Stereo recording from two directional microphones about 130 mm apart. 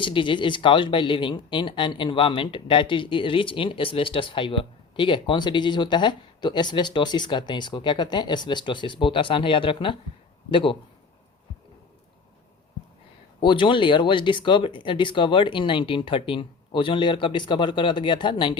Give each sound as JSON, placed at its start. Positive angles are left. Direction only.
{"t": 0.0, "sound": "speech", "side_deg": 40}
{"t": 13.4, "sound": "speech", "side_deg": 40}